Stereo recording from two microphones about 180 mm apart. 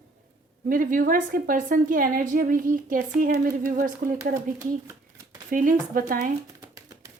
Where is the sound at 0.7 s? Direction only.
50° right (ahead or behind).